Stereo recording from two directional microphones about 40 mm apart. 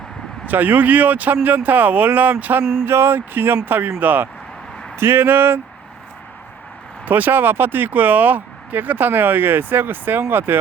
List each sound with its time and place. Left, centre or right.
0.4 s speech: right
2.8 s speech: right
4.9 s speech: right
7.0 s speech: right